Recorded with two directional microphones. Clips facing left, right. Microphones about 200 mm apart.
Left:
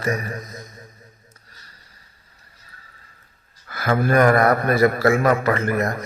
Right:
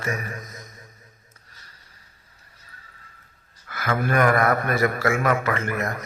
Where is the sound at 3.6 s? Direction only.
35° left (ahead or behind).